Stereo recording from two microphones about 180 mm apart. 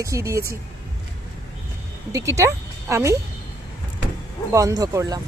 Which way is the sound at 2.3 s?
15° right (ahead or behind).